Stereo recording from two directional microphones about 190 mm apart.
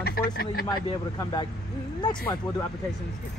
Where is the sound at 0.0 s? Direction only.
55° left (ahead or behind).